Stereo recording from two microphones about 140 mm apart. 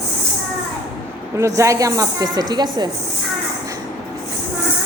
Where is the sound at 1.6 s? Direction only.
25° right (ahead or behind).